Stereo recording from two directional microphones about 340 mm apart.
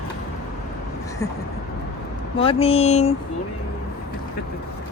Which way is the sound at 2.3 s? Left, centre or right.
Centre.